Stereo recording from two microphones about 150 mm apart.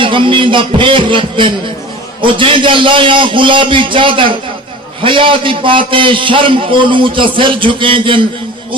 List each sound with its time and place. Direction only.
0.0 s a man's voice: 35° right (ahead or behind)